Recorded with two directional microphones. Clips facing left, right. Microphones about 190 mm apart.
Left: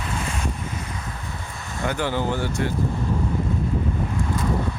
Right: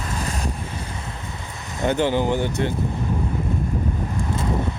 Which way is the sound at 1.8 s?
20° right (ahead or behind).